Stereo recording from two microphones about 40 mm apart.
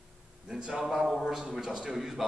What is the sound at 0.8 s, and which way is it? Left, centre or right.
Speech, centre.